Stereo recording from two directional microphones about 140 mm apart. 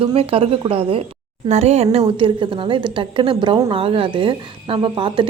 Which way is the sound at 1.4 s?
50° right (ahead or behind).